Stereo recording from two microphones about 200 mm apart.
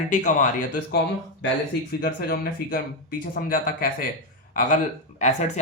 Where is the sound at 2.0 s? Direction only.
50° left (ahead or behind).